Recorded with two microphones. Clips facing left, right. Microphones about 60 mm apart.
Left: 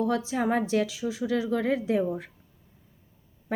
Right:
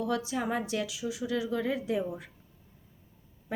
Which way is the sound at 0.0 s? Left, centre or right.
Left.